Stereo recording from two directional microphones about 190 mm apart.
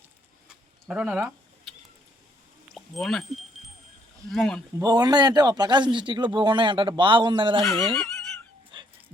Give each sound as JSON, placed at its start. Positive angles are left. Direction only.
{"t": 0.4, "sound": "rodents", "side_deg": -5}
{"t": 2.7, "sound": "speech", "side_deg": 0}
{"t": 4.3, "sound": "speech", "side_deg": 0}
{"t": 4.8, "sound": "a man's voice", "side_deg": -20}
{"t": 7.6, "sound": "speech", "side_deg": 0}
{"t": 8.7, "sound": "dog", "side_deg": -25}